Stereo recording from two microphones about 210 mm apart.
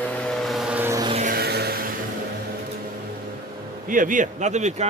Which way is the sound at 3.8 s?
40° right (ahead or behind).